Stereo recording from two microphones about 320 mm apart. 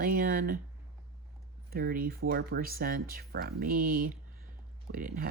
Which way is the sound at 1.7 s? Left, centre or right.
Right.